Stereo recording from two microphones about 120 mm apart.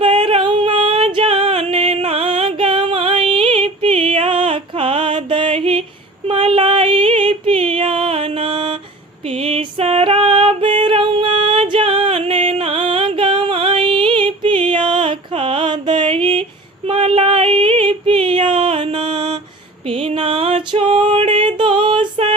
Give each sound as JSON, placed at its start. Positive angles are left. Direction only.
{"t": 0.0, "sound": "music", "side_deg": -45}
{"t": 6.2, "sound": "female singing", "side_deg": -50}
{"t": 9.2, "sound": "music", "side_deg": -55}